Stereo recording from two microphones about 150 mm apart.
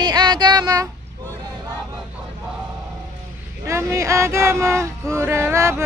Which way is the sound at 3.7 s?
20° right (ahead or behind).